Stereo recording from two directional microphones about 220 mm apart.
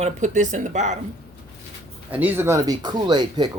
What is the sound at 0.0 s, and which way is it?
Speech, 35° right (ahead or behind).